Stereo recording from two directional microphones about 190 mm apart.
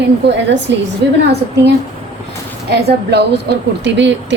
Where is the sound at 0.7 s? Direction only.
70° right (ahead or behind).